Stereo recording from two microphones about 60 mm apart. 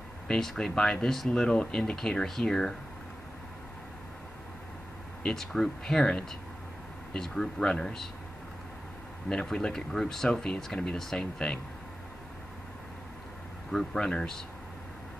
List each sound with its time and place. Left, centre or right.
0.3 s speech: centre
5.2 s speech: centre
9.5 s speech: centre
13.7 s speech: centre